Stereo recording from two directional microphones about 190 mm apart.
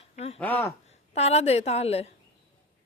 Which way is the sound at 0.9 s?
35° left (ahead or behind).